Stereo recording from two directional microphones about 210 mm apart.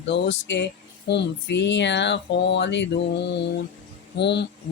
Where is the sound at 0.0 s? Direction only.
60° left (ahead or behind).